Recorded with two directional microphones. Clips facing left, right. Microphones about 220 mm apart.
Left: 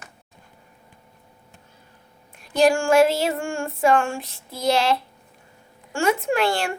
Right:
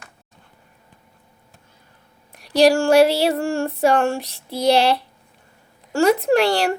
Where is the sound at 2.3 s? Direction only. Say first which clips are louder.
Right 3 dB; 40° right (ahead or behind).